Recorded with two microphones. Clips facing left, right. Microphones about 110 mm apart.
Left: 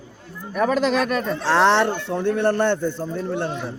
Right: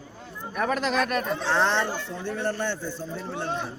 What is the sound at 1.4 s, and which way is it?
A man's voice, 90° left.